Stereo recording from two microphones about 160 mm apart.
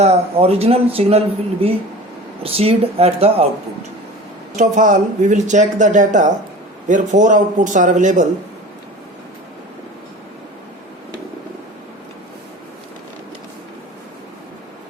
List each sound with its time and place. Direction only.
0.0 s speech: 40° right (ahead or behind)
4.5 s speech: 50° right (ahead or behind)